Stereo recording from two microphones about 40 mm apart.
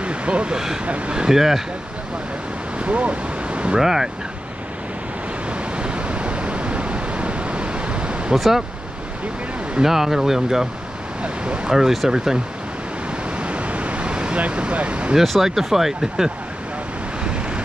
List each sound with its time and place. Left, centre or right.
0.0 s speech: right
1.1 s speech: centre
2.8 s ocean: right
3.7 s speech: centre
5.5 s waves: right
8.4 s speech: centre
9.8 s speech: centre
11.2 s speech: right
11.7 s speech: centre
13.4 s vehicle: right
14.4 s speech: right
15.1 s speech: centre